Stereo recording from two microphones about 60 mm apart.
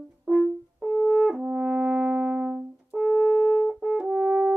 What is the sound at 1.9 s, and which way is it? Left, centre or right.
Synthesizer, centre.